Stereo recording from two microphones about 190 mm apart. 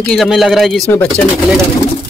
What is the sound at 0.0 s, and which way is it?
Speech, centre (ahead or behind).